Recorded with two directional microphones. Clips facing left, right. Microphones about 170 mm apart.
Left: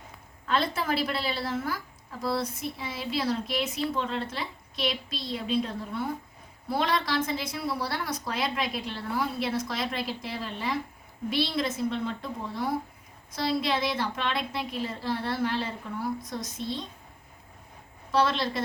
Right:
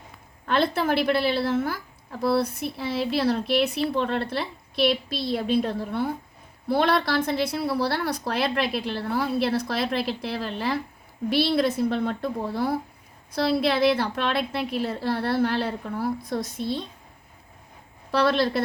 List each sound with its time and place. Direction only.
0.4 s a woman's voice: 60° right (ahead or behind)
18.1 s a woman's voice: 65° right (ahead or behind)